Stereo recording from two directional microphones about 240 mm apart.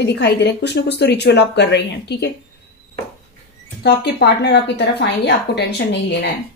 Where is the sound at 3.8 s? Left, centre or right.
Left.